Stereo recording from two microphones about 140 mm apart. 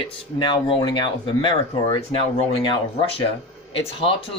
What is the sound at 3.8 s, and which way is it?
Speech, 40° left (ahead or behind).